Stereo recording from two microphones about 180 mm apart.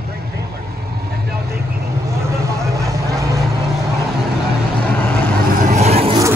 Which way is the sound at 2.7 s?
20° right (ahead or behind).